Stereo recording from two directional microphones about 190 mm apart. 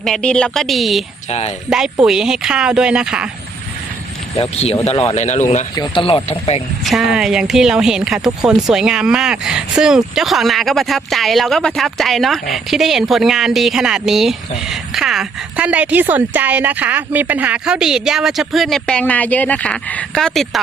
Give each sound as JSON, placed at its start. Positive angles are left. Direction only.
{"t": 0.0, "sound": "speech", "side_deg": 5}
{"t": 1.3, "sound": "speech", "side_deg": 35}
{"t": 1.7, "sound": "speech", "side_deg": -5}
{"t": 4.4, "sound": "speech", "side_deg": 30}
{"t": 5.7, "sound": "speech", "side_deg": 25}
{"t": 6.8, "sound": "speech", "side_deg": 0}